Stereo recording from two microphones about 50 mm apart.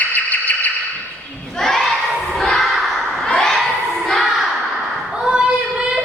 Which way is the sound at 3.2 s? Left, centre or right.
Centre.